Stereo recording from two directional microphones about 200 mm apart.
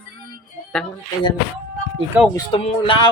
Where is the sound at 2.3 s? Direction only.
25° left (ahead or behind).